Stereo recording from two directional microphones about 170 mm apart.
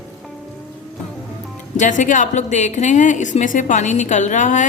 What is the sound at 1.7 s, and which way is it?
Speech, 45° left (ahead or behind).